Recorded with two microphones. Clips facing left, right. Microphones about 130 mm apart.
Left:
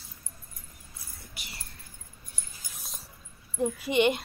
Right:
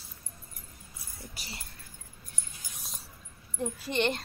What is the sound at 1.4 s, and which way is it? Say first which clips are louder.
Speech: right 1 dB; 40° right (ahead or behind).